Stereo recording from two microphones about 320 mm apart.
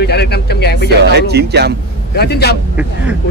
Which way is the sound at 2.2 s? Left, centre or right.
Left.